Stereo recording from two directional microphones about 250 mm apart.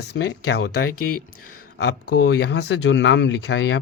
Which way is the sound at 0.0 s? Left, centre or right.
Left.